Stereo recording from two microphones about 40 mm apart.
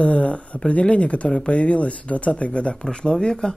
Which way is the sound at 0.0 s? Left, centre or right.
Left.